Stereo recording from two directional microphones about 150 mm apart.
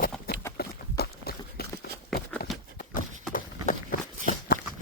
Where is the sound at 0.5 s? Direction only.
90° left.